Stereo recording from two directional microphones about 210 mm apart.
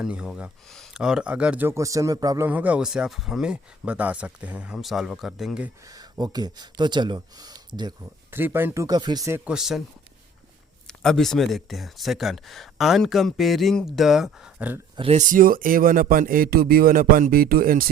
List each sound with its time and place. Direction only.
0.0 s speech: 5° right (ahead or behind)
5.8 s speech: 20° right (ahead or behind); by 9.8 s centre (ahead or behind)
10.8 s speech: centre (ahead or behind)
14.9 s a man's voice: 30° right (ahead or behind)